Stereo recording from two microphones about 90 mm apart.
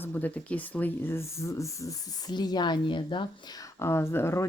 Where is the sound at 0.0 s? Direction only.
20° left (ahead or behind); by 2.3 s 35° left (ahead or behind).